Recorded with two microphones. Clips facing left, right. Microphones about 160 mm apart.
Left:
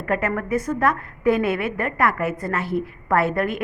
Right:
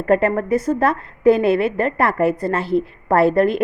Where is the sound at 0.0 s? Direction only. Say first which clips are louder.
Right 7 dB; 30° right (ahead or behind).